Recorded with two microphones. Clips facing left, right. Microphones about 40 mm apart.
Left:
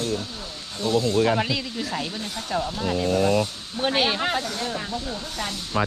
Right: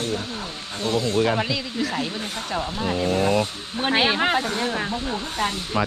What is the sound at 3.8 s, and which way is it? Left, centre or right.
Speech, centre.